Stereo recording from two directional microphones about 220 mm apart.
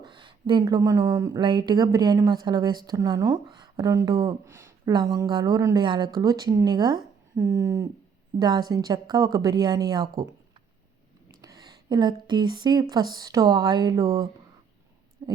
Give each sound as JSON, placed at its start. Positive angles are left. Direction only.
{"t": 0.0, "sound": "speech", "side_deg": -20}
{"t": 11.3, "sound": "speech", "side_deg": -15}
{"t": 15.2, "sound": "a sound", "side_deg": -15}